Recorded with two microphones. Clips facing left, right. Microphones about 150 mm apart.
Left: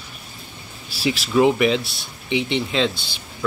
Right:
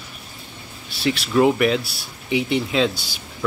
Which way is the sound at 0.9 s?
5° left (ahead or behind).